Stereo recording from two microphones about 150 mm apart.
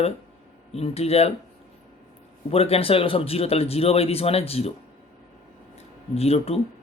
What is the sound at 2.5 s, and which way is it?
Speech, 40° left (ahead or behind).